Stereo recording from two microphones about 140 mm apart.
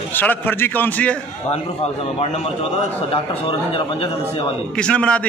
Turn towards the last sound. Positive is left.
turn(degrees=10)  # may be behind; listen again after turning